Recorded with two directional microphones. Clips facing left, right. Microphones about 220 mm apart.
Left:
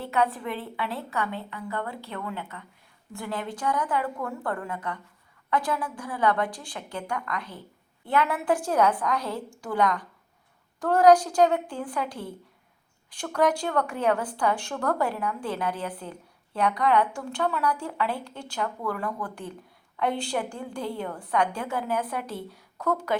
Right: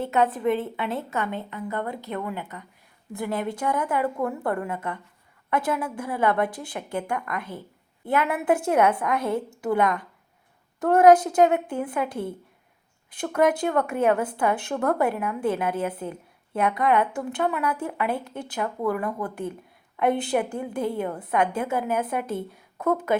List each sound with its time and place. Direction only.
0.0 s a woman's voice: 20° right (ahead or behind)